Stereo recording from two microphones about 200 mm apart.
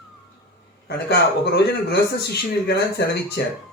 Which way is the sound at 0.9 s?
55° left (ahead or behind).